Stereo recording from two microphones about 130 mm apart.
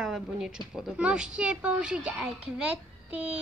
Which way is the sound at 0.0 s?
Centre (ahead or behind).